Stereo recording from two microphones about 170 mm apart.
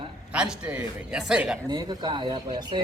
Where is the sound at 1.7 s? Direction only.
25° right (ahead or behind).